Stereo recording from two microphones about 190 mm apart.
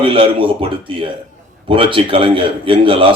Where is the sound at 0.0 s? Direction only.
25° right (ahead or behind).